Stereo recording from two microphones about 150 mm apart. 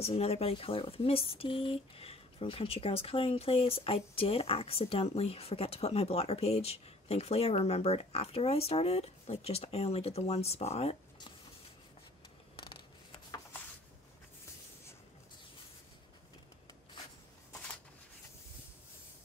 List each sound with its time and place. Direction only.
0.0 s speech: 45° left (ahead or behind)